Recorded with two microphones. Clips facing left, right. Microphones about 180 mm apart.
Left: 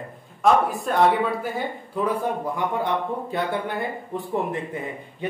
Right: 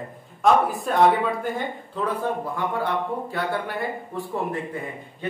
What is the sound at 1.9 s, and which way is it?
Speech, 10° left (ahead or behind).